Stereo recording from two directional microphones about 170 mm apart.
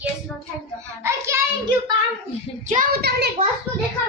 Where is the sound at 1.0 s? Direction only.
15° right (ahead or behind).